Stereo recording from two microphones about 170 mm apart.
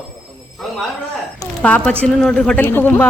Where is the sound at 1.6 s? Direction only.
10° left (ahead or behind).